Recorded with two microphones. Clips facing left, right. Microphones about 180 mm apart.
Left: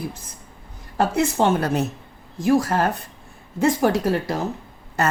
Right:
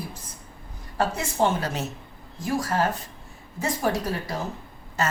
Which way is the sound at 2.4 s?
70° left (ahead or behind).